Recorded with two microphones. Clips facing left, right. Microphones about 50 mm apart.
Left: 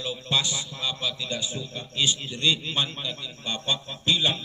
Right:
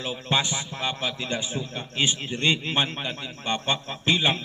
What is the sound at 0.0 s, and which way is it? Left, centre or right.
A man's voice, right.